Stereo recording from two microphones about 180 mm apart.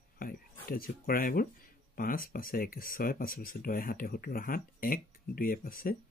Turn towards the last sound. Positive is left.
turn(degrees=50)  # may be behind; listen again after turning